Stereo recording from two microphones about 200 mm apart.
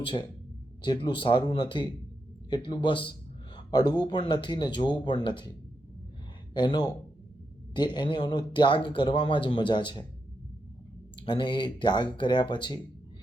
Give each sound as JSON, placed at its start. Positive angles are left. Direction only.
{"t": 0.0, "sound": "a man's voice", "side_deg": 25}
{"t": 6.5, "sound": "a man's voice", "side_deg": 20}
{"t": 11.2, "sound": "a man's voice", "side_deg": 25}